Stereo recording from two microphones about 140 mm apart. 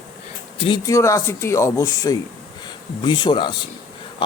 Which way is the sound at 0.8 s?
25° left (ahead or behind).